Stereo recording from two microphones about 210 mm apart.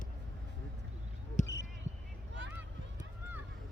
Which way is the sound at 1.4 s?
35° left (ahead or behind).